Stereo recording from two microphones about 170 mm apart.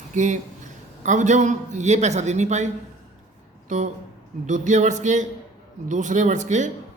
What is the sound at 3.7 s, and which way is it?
Speech, 45° right (ahead or behind).